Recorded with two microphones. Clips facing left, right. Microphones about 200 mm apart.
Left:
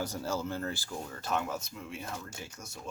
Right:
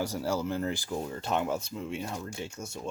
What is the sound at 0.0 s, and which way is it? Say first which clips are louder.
Speech: right 4 dB; 10° right (ahead or behind).